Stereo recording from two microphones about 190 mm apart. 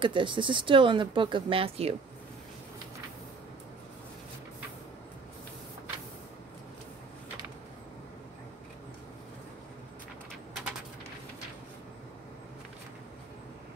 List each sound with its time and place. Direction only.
0.0 s speech: 25° right (ahead or behind)